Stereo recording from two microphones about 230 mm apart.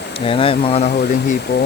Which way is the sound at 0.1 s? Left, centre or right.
Left.